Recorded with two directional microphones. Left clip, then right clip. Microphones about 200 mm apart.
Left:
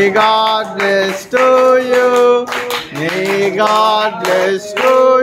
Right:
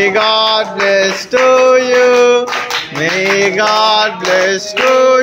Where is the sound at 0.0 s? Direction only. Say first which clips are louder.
Even; 10° left (ahead or behind).